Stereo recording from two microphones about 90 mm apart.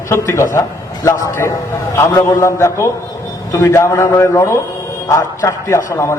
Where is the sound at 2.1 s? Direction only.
45° left (ahead or behind).